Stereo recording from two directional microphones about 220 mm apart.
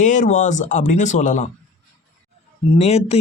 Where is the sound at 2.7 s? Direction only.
30° left (ahead or behind).